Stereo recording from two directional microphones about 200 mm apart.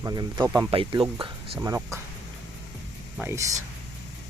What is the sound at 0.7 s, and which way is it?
Speech, 25° right (ahead or behind).